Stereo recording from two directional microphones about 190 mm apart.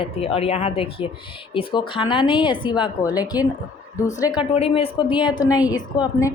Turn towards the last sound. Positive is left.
turn(degrees=20)  # may be behind; listen again after turning